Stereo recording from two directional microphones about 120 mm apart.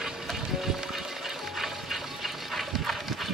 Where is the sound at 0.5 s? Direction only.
5° right (ahead or behind).